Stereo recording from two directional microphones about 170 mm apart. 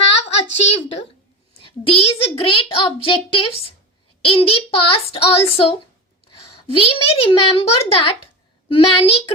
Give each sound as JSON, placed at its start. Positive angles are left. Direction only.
{"t": 0.2, "sound": "a child's voice", "side_deg": 40}
{"t": 6.7, "sound": "a child's voice", "side_deg": 35}